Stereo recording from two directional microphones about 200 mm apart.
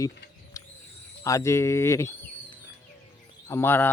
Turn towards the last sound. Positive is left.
turn(degrees=10)  # may be behind; listen again after turning